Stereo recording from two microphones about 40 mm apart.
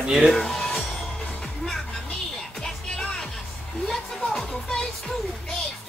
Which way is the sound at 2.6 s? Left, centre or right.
Centre.